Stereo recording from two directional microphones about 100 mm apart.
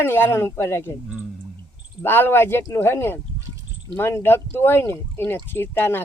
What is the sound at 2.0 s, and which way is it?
Speech, 20° left (ahead or behind).